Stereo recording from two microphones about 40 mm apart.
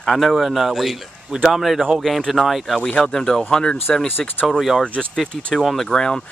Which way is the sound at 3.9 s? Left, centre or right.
Left.